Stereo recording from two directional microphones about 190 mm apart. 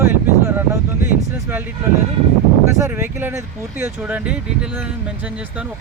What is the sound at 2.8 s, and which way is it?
Speech, 10° right (ahead or behind).